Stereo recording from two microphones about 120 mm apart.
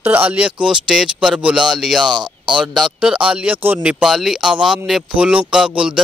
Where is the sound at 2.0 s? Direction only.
40° right (ahead or behind).